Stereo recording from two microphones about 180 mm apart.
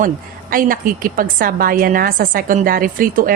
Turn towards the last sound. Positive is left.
turn(degrees=-50)  # may be behind; listen again after turning